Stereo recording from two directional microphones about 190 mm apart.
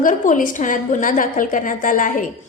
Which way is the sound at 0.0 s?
40° left (ahead or behind).